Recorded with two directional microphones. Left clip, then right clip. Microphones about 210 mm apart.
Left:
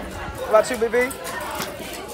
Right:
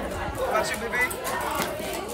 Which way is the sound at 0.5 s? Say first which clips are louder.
Left 11 dB; centre (ahead or behind).